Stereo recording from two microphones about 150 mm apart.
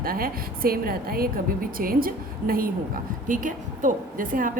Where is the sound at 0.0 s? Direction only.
80° right.